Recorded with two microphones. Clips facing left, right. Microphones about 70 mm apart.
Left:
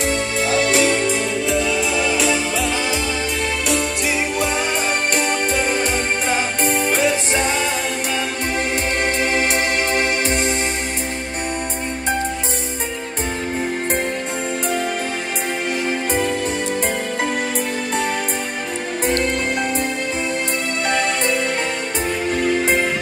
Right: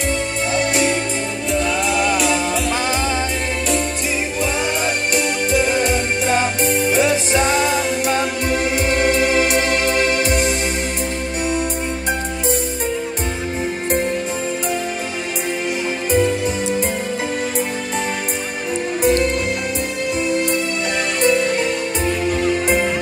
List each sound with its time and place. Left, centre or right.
0.5 s music: left
5.1 s music: left
8.8 s music: left
16.1 s music: left
18.9 s music: left